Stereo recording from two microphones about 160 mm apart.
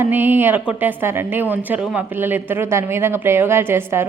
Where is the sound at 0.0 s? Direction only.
10° right (ahead or behind).